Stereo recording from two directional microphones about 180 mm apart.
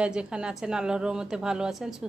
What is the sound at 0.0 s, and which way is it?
A woman's voice, 5° right (ahead or behind).